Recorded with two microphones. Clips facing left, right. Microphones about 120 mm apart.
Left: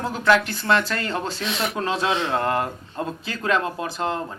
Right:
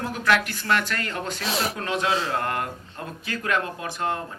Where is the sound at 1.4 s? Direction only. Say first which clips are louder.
Left 1 dB; 35° right (ahead or behind).